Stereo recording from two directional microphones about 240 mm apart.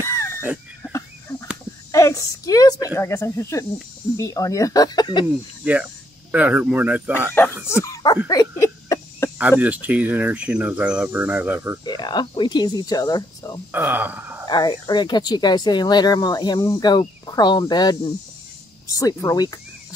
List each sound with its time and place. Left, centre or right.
0.0 s a sound: centre
0.4 s chicken: centre
1.9 s a sound: centre
4.2 s speech: centre
6.3 s speech: centre
7.6 s speech: centre
8.3 s a sound: centre
9.4 s speech: centre
11.8 s speech: centre
13.7 s speech: centre
14.5 s speech: centre